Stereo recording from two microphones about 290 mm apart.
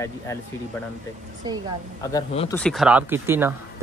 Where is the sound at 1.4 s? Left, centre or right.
Centre.